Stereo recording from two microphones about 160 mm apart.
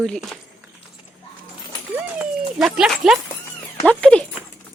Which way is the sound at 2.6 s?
5° right (ahead or behind).